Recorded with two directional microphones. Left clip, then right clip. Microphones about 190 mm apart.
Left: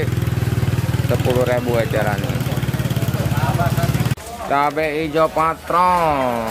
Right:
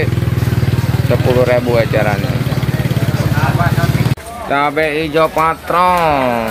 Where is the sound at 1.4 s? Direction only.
5° right (ahead or behind).